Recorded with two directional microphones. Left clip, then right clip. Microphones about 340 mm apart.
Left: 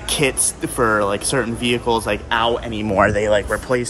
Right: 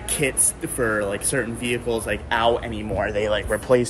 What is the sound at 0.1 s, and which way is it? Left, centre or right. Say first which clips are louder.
Speech: left 5 dB; centre.